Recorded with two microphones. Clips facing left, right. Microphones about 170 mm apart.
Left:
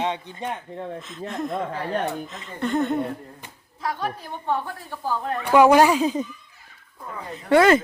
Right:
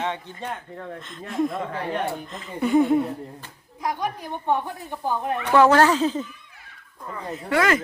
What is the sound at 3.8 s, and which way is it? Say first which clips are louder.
Speech: right 1 dB; 15° right (ahead or behind).